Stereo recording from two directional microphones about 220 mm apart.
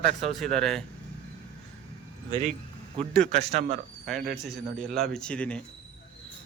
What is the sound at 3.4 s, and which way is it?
Speech, 30° right (ahead or behind).